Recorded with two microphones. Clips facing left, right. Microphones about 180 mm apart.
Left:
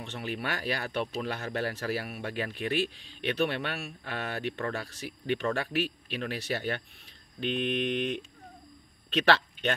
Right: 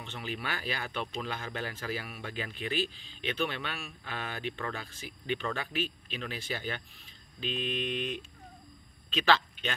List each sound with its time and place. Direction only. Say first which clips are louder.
0.0 s speech: left 4 dB; 65° left (ahead or behind)